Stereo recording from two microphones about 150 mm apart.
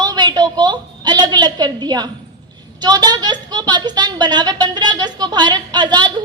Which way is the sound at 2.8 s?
25° right (ahead or behind).